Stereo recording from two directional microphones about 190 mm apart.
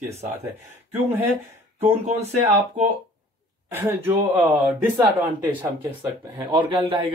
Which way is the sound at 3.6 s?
15° right (ahead or behind).